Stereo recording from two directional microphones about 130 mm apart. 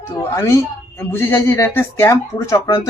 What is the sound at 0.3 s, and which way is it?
Speech, 20° left (ahead or behind).